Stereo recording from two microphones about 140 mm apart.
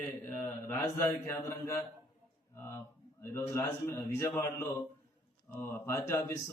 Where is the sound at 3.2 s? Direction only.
20° left (ahead or behind).